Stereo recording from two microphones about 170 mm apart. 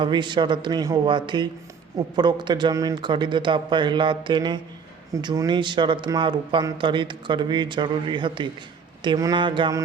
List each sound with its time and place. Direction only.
0.0 s a man's voice: 25° right (ahead or behind)